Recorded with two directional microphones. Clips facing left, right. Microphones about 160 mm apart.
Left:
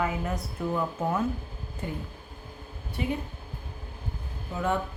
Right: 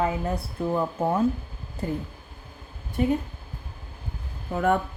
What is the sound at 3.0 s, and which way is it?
Speech, 45° right (ahead or behind).